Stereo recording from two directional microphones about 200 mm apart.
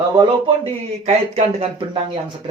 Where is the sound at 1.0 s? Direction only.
35° right (ahead or behind).